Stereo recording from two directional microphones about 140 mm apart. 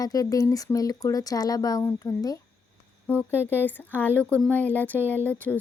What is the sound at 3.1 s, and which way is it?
Speech, 10° right (ahead or behind).